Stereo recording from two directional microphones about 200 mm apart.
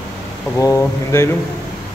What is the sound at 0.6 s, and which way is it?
Speech, 15° left (ahead or behind).